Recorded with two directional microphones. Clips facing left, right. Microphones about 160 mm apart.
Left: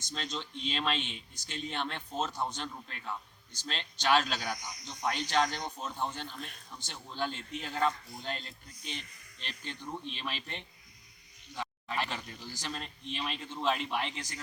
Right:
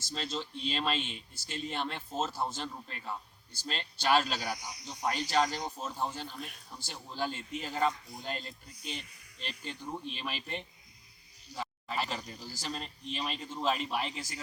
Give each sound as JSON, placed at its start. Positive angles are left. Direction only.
{"t": 0.0, "sound": "speech", "side_deg": -5}
{"t": 11.5, "sound": "a sound", "side_deg": -5}
{"t": 12.5, "sound": "speech", "side_deg": -10}
{"t": 13.1, "sound": "a man's voice", "side_deg": -40}
{"t": 13.4, "sound": "speech", "side_deg": -5}